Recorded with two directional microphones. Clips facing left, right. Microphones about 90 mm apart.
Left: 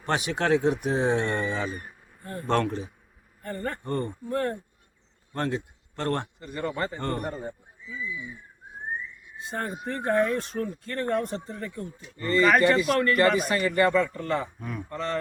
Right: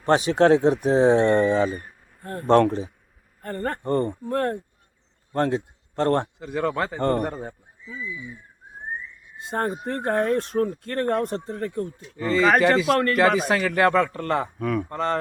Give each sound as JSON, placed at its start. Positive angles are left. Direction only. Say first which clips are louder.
{"t": 0.0, "sound": "speech", "louder": "right 9 dB", "side_deg": -35}
{"t": 3.4, "sound": "speech", "louder": "right 4 dB", "side_deg": -55}
{"t": 3.8, "sound": "speech", "louder": "right 8 dB", "side_deg": -35}
{"t": 4.3, "sound": "speech", "louder": "right 2 dB", "side_deg": -60}
{"t": 5.3, "sound": "a man's voice", "louder": "right 6 dB", "side_deg": -35}
{"t": 6.4, "sound": "speech", "louder": "right 5 dB", "side_deg": -90}
{"t": 7.0, "sound": "speech", "louder": "right 8 dB", "side_deg": -35}
{"t": 9.5, "sound": "a man's voice", "louder": "right 6 dB", "side_deg": -50}
{"t": 14.6, "sound": "speech", "louder": "right 10 dB", "side_deg": -90}
{"t": 14.8, "sound": "speech", "louder": "right 5 dB", "side_deg": -50}